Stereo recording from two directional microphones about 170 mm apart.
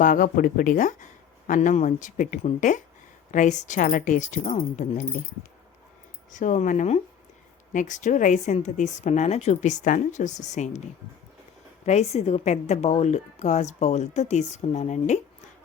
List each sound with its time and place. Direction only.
0.0 s a woman's voice: 55° left (ahead or behind)
6.3 s a woman's voice: 45° left (ahead or behind)
11.9 s a woman's voice: 40° left (ahead or behind)